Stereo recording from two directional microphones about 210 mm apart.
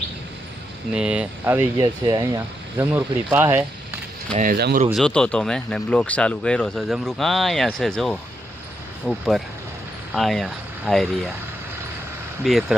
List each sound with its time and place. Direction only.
0.9 s speech: 5° right (ahead or behind)
4.4 s speech: 45° right (ahead or behind)
4.9 s speech: centre (ahead or behind)
12.5 s speech: centre (ahead or behind)